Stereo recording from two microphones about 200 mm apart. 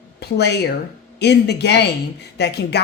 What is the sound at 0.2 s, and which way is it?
Speech, 55° left (ahead or behind).